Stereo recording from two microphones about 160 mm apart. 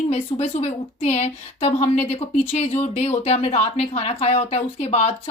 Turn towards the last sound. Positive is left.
turn(degrees=40)  # may be behind; listen again after turning